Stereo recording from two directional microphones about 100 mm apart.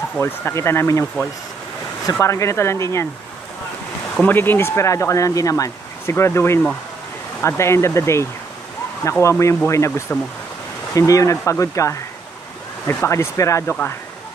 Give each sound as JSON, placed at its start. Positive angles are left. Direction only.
{"t": 0.2, "sound": "speech", "side_deg": 25}
{"t": 2.1, "sound": "speech", "side_deg": 30}
{"t": 4.2, "sound": "speech", "side_deg": 20}